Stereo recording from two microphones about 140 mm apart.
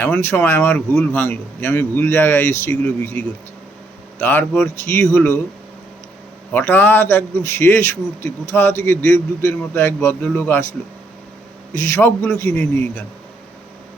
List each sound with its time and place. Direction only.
0.0 s a man's voice: 15° left (ahead or behind)
6.5 s a man's voice: 15° left (ahead or behind)
11.7 s a man's voice: 20° left (ahead or behind)